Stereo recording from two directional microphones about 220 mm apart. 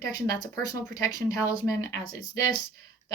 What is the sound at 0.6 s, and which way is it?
Speech, 15° left (ahead or behind).